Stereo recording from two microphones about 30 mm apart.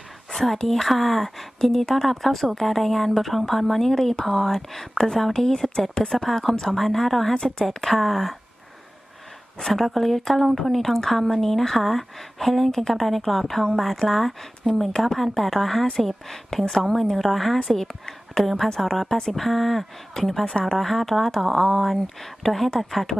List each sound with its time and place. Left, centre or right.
0.3 s a woman's voice: centre
9.6 s a woman's voice: centre
16.6 s speech: centre
16.9 s a woman's voice: centre
19.0 s a woman's voice: left
19.3 s a woman's voice: centre
20.4 s a woman's voice: left
20.7 s a woman's voice: centre